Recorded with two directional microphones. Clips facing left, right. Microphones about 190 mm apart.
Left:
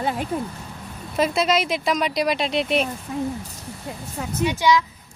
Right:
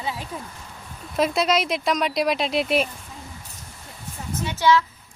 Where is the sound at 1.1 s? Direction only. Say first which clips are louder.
Left 1 dB; centre (ahead or behind).